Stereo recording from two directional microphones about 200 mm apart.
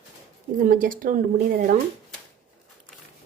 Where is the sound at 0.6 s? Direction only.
45° right (ahead or behind).